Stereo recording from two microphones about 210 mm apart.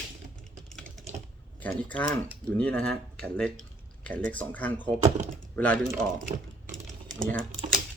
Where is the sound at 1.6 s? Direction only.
5° left (ahead or behind).